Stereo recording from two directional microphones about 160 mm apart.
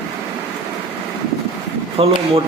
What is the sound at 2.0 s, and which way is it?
Speech, 35° right (ahead or behind).